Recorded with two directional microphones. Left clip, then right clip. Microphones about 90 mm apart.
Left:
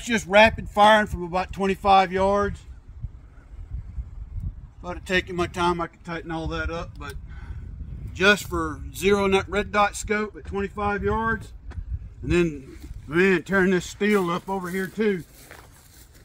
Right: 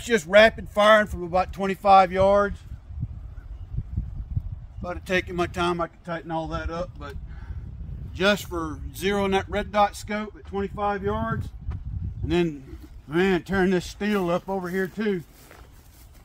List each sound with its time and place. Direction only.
0.0 s speech: 40° right (ahead or behind)
4.8 s speech: 35° right (ahead or behind)
6.2 s speech: 25° right (ahead or behind); by 15.1 s 40° right (ahead or behind)